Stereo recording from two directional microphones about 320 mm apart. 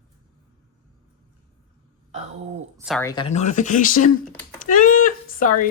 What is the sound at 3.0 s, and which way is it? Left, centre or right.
Speech, centre.